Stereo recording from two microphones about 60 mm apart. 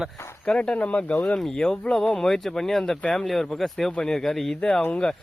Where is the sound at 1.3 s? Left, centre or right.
Centre.